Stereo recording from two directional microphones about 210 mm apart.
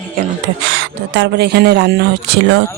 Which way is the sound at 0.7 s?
60° right (ahead or behind).